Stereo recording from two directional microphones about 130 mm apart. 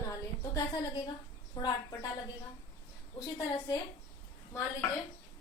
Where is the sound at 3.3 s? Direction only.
25° left (ahead or behind).